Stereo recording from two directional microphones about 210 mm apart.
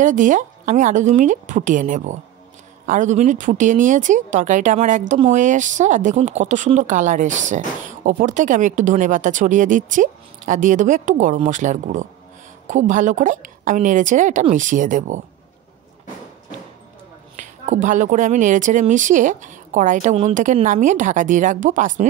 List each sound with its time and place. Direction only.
0.0 s speech: 40° right (ahead or behind)
17.4 s speech: 35° right (ahead or behind)